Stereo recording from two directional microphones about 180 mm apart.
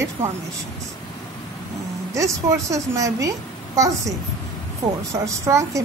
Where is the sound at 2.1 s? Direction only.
15° right (ahead or behind).